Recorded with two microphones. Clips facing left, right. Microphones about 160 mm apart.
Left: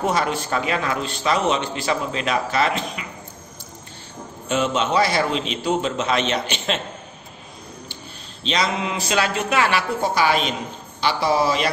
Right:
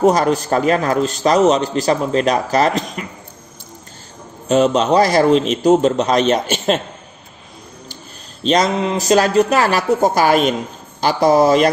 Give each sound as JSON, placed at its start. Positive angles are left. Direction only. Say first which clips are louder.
{"t": 0.0, "sound": "a man's voice", "louder": "right 8 dB", "side_deg": -40}
{"t": 4.5, "sound": "a man's voice", "louder": "right 8 dB", "side_deg": -40}
{"t": 8.5, "sound": "a man's voice", "louder": "right 7 dB", "side_deg": -40}